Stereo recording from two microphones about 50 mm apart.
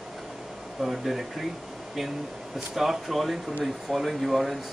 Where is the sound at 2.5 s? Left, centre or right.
Centre.